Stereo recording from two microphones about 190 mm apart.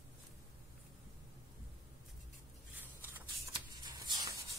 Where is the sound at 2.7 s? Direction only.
10° right (ahead or behind).